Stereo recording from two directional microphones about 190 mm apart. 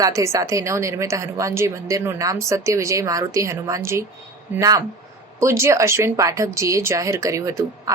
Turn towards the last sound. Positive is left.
turn(degrees=-15)  # may be behind; listen again after turning